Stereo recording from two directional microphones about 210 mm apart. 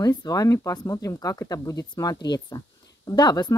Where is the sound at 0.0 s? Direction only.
20° left (ahead or behind).